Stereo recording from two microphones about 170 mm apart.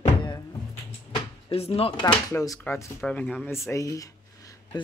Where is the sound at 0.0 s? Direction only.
25° left (ahead or behind).